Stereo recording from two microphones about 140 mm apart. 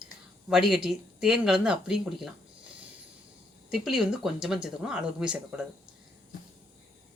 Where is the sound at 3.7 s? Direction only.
Centre (ahead or behind).